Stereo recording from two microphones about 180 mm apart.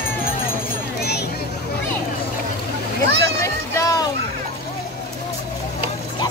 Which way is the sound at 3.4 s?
20° left (ahead or behind).